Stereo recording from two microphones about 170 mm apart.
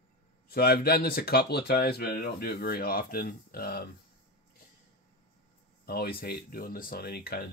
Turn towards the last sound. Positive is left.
turn(degrees=65)  # may be behind; listen again after turning